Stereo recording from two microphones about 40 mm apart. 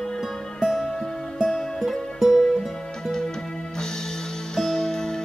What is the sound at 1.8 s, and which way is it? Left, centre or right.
Music, centre.